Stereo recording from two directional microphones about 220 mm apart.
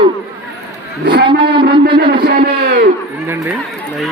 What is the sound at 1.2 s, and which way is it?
Speech, 20° right (ahead or behind).